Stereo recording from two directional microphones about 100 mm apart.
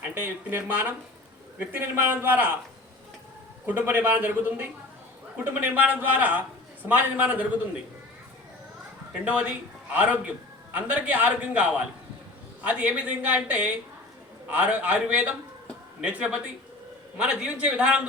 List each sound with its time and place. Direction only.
0.1 s a man's voice: 20° right (ahead or behind)
3.7 s a man's voice: 15° right (ahead or behind)
9.2 s a man's voice: 10° right (ahead or behind)